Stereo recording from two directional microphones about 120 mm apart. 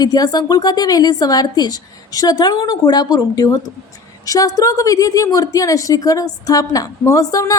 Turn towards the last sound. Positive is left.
turn(degrees=30)  # may be behind; listen again after turning